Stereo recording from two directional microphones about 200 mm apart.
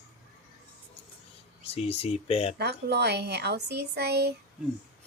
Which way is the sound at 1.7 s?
30° left (ahead or behind).